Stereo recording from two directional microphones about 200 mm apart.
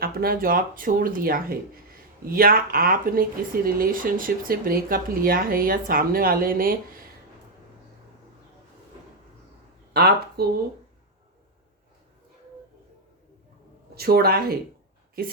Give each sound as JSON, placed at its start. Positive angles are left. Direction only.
{"t": 0.0, "sound": "speech", "side_deg": -50}
{"t": 9.9, "sound": "speech", "side_deg": -50}
{"t": 13.9, "sound": "speech", "side_deg": -50}